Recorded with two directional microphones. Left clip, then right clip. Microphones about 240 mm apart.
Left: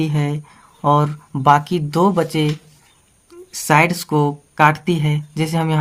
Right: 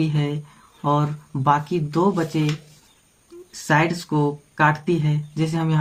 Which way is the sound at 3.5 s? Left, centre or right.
Left.